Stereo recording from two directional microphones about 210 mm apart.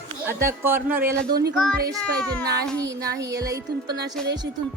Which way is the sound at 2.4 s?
15° right (ahead or behind).